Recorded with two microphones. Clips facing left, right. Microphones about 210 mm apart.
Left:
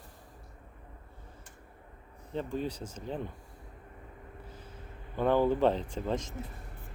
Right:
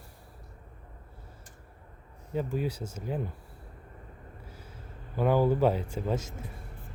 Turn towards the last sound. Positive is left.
turn(degrees=-10)  # may be behind; listen again after turning